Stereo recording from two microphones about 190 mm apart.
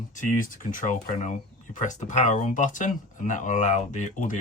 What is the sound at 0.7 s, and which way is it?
Speech, 45° left (ahead or behind).